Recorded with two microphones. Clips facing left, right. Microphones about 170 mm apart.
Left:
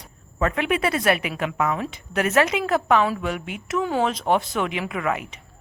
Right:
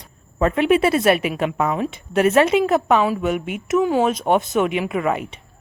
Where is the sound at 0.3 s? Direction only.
25° right (ahead or behind).